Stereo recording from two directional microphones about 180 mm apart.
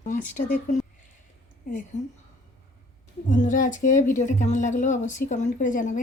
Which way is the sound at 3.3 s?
45° left (ahead or behind).